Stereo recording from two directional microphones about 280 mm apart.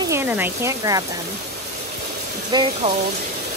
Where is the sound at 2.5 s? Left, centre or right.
Centre.